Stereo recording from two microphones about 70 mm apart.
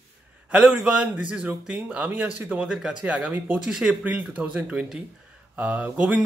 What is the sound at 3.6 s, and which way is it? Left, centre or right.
Speech, centre.